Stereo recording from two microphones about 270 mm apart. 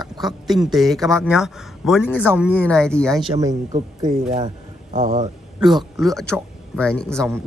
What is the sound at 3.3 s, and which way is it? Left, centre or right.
Speech, centre.